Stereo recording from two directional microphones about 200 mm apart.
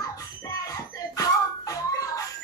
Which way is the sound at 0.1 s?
15° left (ahead or behind).